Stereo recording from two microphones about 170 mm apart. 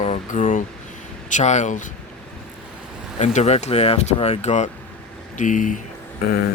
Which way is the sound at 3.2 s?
40° left (ahead or behind).